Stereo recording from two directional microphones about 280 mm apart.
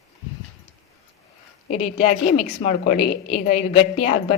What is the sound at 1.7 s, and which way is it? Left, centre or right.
A woman's voice, left.